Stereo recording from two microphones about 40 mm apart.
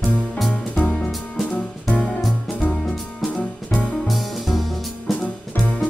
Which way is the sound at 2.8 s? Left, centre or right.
Centre.